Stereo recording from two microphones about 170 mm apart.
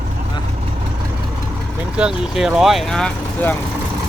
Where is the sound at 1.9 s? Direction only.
5° right (ahead or behind).